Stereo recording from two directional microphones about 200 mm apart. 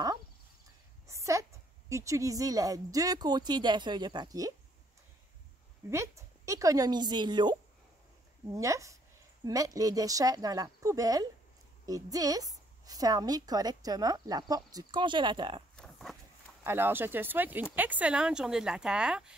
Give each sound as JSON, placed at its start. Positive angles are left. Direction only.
{"t": 1.0, "sound": "a woman's voice", "side_deg": -15}
{"t": 5.9, "sound": "a woman's voice", "side_deg": -15}
{"t": 8.5, "sound": "a woman's voice", "side_deg": -15}
{"t": 15.7, "sound": "a sound", "side_deg": 5}
{"t": 16.6, "sound": "a woman's voice", "side_deg": -10}